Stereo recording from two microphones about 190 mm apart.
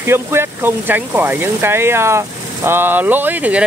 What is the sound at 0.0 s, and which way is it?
Speech, 15° right (ahead or behind).